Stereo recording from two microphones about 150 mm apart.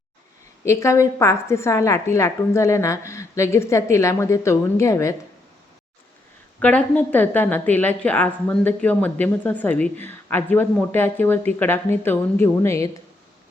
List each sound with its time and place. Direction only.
0.6 s a woman's voice: 20° left (ahead or behind)
6.6 s a woman's voice: 10° left (ahead or behind)